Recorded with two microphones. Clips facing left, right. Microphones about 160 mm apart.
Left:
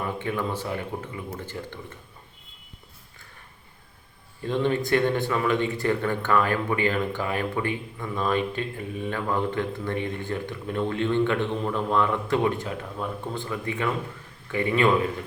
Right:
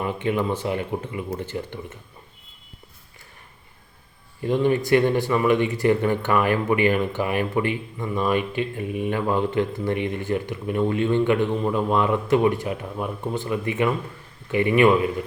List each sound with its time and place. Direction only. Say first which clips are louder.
0.0 s speech: right 5 dB; 20° right (ahead or behind)
4.4 s speech: right 4 dB; 10° right (ahead or behind)